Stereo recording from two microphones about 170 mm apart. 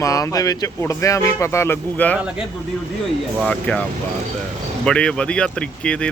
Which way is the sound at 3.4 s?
5° left (ahead or behind).